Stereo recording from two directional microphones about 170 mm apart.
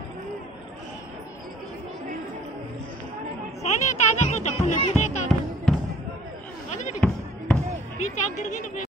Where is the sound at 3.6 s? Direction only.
40° left (ahead or behind).